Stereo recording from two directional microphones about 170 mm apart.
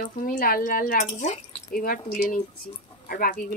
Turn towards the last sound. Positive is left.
turn(degrees=60)  # may be behind; listen again after turning